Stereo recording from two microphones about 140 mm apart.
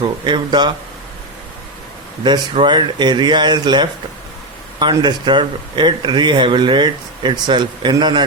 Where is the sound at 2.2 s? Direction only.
35° right (ahead or behind).